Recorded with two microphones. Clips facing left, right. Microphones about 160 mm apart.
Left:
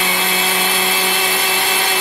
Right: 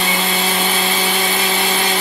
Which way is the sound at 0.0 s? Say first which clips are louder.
Right 1 dB; centre (ahead or behind).